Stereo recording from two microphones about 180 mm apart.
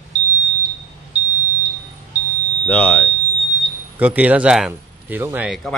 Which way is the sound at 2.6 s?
5° left (ahead or behind).